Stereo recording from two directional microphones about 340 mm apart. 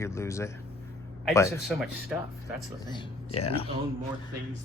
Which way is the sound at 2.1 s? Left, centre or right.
Centre.